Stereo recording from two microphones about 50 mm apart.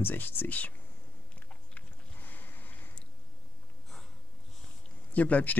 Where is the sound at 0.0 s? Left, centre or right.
Left.